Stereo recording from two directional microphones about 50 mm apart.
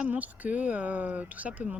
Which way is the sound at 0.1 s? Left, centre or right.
Right.